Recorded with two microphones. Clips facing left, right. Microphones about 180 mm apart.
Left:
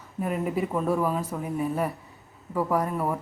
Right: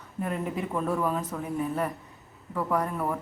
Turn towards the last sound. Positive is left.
turn(degrees=10)  # may be behind; listen again after turning